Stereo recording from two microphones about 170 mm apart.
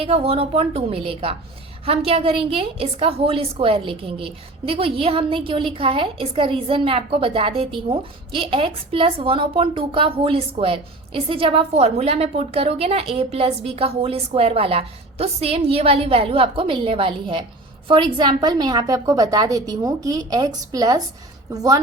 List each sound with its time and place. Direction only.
0.0 s a woman's voice: 35° right (ahead or behind)